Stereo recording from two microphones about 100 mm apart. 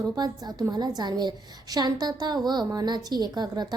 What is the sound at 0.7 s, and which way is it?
A woman's voice, 45° right (ahead or behind).